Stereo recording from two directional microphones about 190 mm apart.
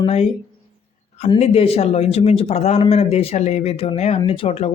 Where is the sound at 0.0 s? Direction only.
35° left (ahead or behind).